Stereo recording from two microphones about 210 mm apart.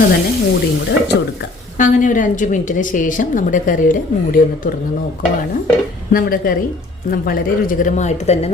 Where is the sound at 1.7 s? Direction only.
40° left (ahead or behind).